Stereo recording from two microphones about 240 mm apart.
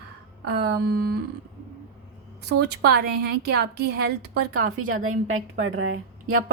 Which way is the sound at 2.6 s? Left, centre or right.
Right.